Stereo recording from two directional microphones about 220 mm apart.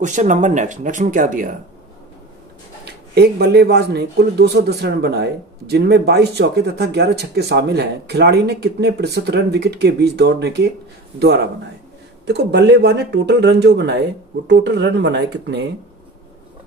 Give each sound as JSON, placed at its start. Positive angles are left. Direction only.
{"t": 0.0, "sound": "speech", "side_deg": -35}
{"t": 2.8, "sound": "speech", "side_deg": -45}